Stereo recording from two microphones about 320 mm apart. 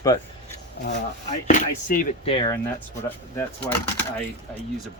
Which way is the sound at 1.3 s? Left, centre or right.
Left.